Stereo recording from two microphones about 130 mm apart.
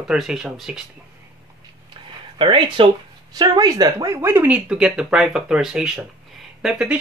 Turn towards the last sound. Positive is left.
turn(degrees=-5)  # may be behind; listen again after turning